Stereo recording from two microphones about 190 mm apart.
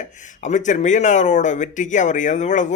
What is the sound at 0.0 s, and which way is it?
Speech, 40° left (ahead or behind).